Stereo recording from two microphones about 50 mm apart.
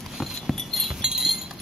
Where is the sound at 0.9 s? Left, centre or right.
Centre.